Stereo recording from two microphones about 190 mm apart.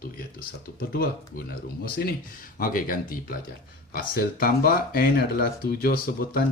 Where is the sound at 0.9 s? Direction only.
50° left (ahead or behind).